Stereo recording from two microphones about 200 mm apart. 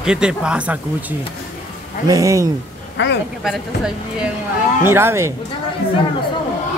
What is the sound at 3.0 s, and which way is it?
Speech, 60° left (ahead or behind).